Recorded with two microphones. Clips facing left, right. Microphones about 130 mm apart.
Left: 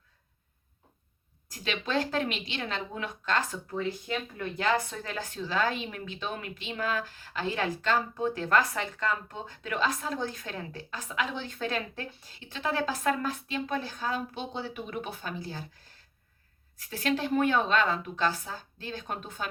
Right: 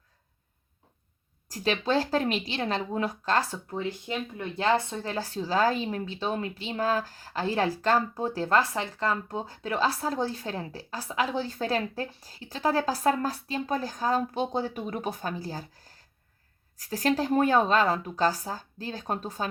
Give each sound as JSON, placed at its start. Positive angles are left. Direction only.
{"t": 1.5, "sound": "a woman's voice", "side_deg": -40}